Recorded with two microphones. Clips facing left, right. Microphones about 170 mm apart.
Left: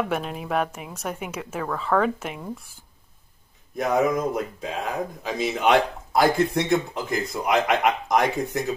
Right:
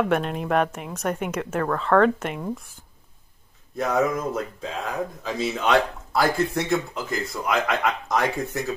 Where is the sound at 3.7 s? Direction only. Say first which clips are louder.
Left 1 dB; 15° left (ahead or behind).